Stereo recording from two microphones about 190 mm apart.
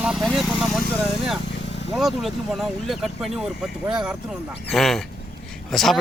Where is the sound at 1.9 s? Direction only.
Centre (ahead or behind).